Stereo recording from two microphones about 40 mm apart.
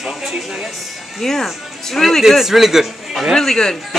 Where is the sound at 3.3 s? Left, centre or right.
Centre.